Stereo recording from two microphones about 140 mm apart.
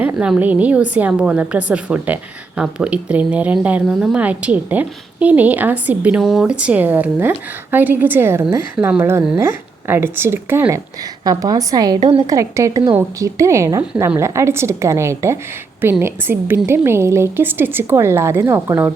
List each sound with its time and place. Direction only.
0.0 s speech: 10° right (ahead or behind)
11.3 s a woman's voice: 25° right (ahead or behind)
11.9 s a woman's voice: 40° right (ahead or behind)
12.3 s a woman's voice: 20° right (ahead or behind)